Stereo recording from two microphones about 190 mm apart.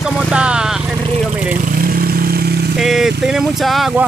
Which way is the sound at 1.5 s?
50° right (ahead or behind).